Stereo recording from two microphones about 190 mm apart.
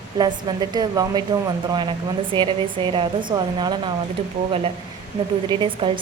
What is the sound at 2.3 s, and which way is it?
Speech, 25° right (ahead or behind).